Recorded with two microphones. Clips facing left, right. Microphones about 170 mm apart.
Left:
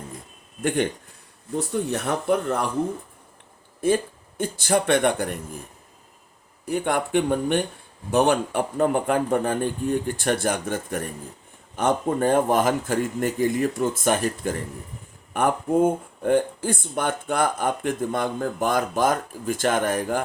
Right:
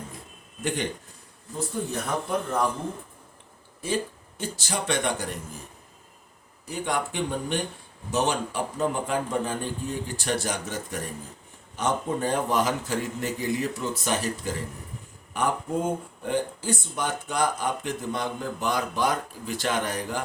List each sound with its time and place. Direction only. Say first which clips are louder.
1.5 s speech: left 5 dB; 70° left (ahead or behind)
3.8 s speech: left 7 dB; 50° left (ahead or behind)
6.7 s speech: left 5 dB; 55° left (ahead or behind)